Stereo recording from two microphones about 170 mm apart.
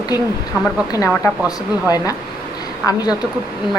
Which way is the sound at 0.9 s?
15° left (ahead or behind).